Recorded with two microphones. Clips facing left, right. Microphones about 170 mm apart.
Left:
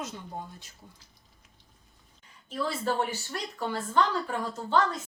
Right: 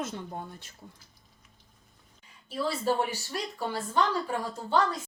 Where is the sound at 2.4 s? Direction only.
10° right (ahead or behind).